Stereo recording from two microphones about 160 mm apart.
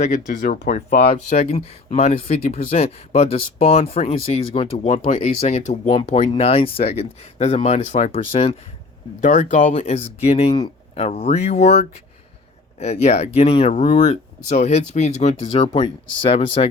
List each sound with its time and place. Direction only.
0.0 s speech: 50° left (ahead or behind)
9.2 s speech: 50° left (ahead or behind)
15.7 s speech: 30° left (ahead or behind)